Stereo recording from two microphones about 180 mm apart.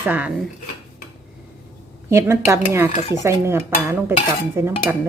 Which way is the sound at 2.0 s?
15° right (ahead or behind).